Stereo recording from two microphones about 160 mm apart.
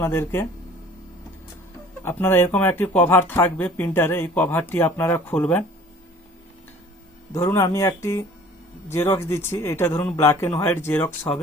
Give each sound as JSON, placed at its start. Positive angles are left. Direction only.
{"t": 0.0, "sound": "speech", "side_deg": 15}
{"t": 2.0, "sound": "speech", "side_deg": 15}
{"t": 7.3, "sound": "speech", "side_deg": 15}